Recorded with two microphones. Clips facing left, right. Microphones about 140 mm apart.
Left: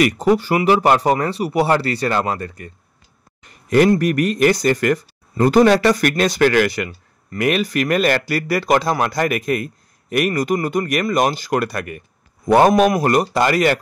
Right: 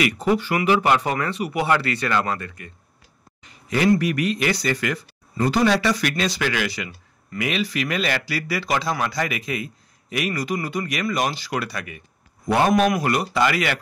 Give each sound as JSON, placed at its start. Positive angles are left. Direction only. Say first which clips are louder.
{"t": 0.0, "sound": "speech", "louder": "left 5 dB", "side_deg": 40}
{"t": 3.4, "sound": "a sound", "louder": "left 7 dB", "side_deg": 50}
{"t": 3.9, "sound": "speech", "louder": "left 3 dB", "side_deg": 45}
{"t": 12.4, "sound": "speech", "louder": "left 6 dB", "side_deg": 40}